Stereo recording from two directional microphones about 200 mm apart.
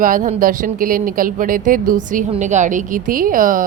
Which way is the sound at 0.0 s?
45° right (ahead or behind).